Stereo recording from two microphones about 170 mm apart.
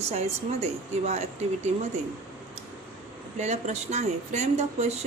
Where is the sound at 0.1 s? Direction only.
40° right (ahead or behind).